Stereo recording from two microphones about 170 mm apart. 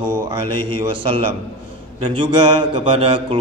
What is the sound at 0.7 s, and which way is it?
Speech, 30° right (ahead or behind).